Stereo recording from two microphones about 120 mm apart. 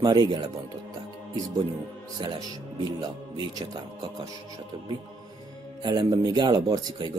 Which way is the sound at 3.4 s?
35° right (ahead or behind).